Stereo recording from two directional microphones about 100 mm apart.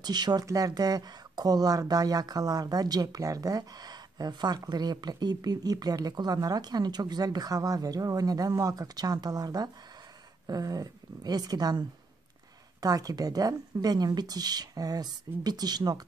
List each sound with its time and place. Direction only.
0.0 s speech: 45° right (ahead or behind)
12.8 s speech: 40° right (ahead or behind)